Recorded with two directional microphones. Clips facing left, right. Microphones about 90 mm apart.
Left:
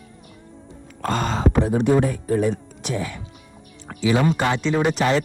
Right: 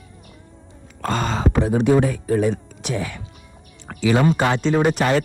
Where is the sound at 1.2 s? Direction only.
90° right.